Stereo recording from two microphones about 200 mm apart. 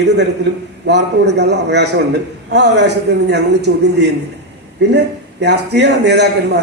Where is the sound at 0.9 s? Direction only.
60° right (ahead or behind).